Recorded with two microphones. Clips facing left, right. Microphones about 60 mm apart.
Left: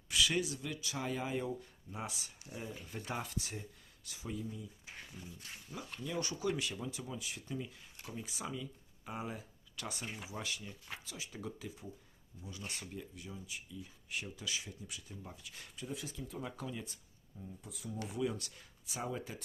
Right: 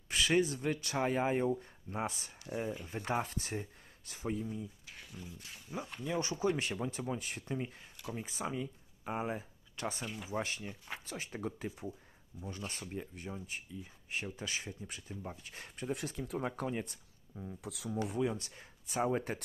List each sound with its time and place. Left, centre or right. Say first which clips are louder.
0.1 s speech: right 4 dB; right
5.2 s speech: right 6 dB; centre
5.7 s speech: right 4 dB; right
17.4 s speech: right 5 dB; right
18.0 s speech: right 3 dB; right
18.9 s speech: right 8 dB; right